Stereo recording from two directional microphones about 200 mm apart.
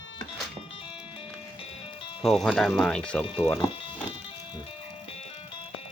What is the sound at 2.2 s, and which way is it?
Speech, centre (ahead or behind).